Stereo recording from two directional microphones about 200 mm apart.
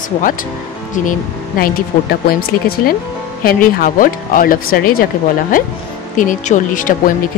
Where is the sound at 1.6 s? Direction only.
50° left (ahead or behind).